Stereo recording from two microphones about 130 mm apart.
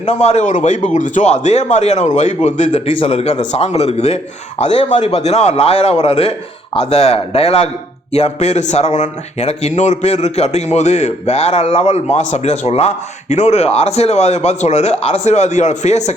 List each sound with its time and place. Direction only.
0.0 s a man's voice: 60° left (ahead or behind)
2.7 s a man's voice: 45° left (ahead or behind); by 16.1 s 60° left (ahead or behind)